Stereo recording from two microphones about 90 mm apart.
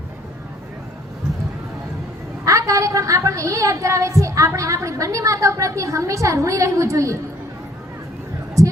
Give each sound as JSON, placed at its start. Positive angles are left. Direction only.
{"t": 2.4, "sound": "a woman's voice", "side_deg": -35}
{"t": 8.6, "sound": "heart sounds", "side_deg": -35}